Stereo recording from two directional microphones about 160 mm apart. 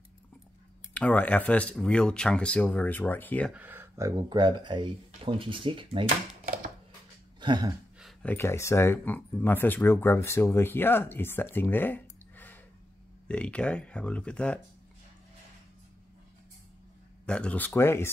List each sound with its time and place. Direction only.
0.9 s speech: 10° left (ahead or behind)
3.5 s speech: 15° right (ahead or behind); by 6.0 s 30° right (ahead or behind)
7.3 s a sound: 30° right (ahead or behind)
8.0 s speech: 10° left (ahead or behind)
17.3 s speech: 5° left (ahead or behind)